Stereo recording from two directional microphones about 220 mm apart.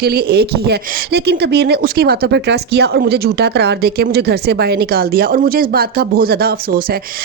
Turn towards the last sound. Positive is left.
turn(degrees=-45)  # may be behind; listen again after turning